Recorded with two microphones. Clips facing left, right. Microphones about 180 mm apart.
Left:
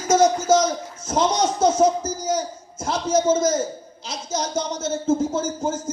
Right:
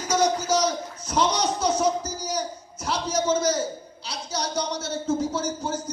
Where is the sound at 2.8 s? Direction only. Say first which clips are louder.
Left 5 dB; 50° left (ahead or behind).